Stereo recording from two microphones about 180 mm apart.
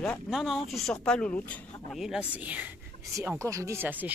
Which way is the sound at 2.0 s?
5° right (ahead or behind).